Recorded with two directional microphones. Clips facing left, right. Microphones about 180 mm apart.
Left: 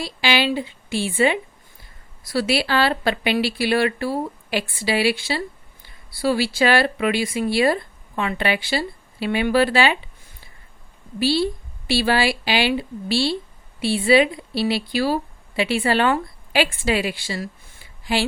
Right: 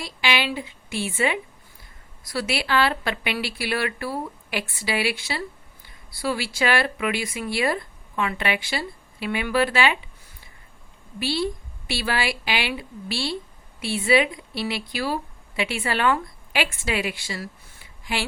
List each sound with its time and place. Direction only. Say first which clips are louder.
0.0 s speech: left 4 dB; 30° left (ahead or behind)
11.2 s a woman's voice: left 5 dB; 30° left (ahead or behind)